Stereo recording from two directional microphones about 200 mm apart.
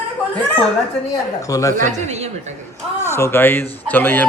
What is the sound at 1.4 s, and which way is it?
Speech, 15° left (ahead or behind).